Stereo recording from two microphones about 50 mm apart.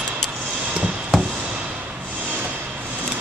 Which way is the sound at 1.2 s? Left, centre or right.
Centre.